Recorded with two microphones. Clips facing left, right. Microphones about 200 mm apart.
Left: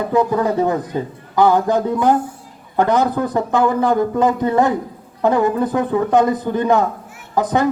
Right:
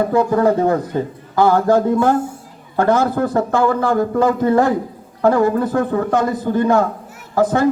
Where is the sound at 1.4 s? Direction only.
20° left (ahead or behind).